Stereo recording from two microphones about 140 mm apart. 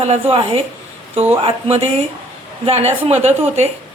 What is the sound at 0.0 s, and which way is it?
A woman's voice, 45° right (ahead or behind).